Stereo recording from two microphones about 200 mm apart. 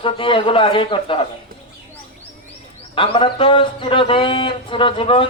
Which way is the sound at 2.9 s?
25° left (ahead or behind).